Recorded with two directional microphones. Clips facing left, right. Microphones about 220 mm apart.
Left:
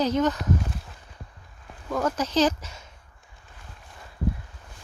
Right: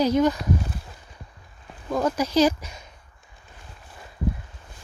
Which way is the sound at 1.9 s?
10° right (ahead or behind).